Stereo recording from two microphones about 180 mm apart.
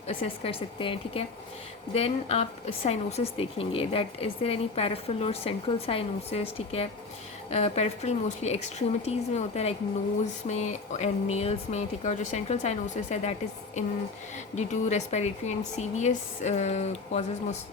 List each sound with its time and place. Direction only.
0.1 s speech: 30° left (ahead or behind)
14.5 s speech: 40° left (ahead or behind)